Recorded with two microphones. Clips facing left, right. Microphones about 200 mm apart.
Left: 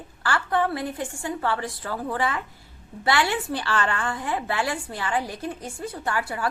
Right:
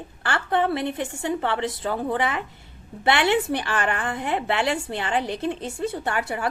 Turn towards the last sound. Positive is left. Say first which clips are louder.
# right 1 dB
turn(degrees=-25)  # may be behind; listen again after turning